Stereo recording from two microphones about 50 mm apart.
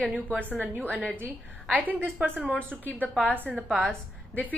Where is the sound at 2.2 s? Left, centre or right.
Right.